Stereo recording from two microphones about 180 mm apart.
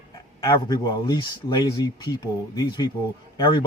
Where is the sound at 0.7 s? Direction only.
20° left (ahead or behind).